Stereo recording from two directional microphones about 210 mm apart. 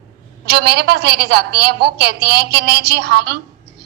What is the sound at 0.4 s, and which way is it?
A woman's voice, 50° right (ahead or behind).